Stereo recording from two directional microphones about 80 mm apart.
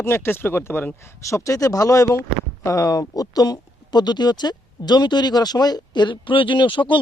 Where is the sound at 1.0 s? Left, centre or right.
Left.